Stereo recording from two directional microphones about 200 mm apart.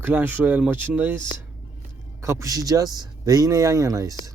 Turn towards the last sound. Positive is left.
turn(degrees=-15)  # may be behind; listen again after turning